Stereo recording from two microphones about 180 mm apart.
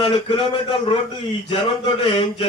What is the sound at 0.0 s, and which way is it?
Speech, 30° left (ahead or behind).